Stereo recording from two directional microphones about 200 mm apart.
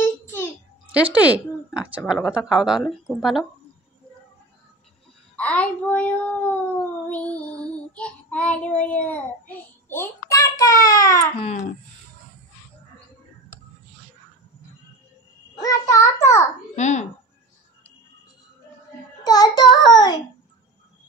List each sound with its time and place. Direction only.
0.0 s a sound: 10° left (ahead or behind)
0.9 s a woman's voice: 5° right (ahead or behind)
5.3 s child singing: 5° left (ahead or behind)
15.6 s child singing: 15° left (ahead or behind)
16.7 s speech: 35° left (ahead or behind)
19.2 s a child's voice: 20° left (ahead or behind)